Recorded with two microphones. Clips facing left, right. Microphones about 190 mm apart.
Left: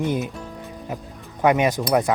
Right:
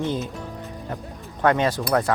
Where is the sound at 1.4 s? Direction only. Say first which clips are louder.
Left 2 dB; 15° left (ahead or behind).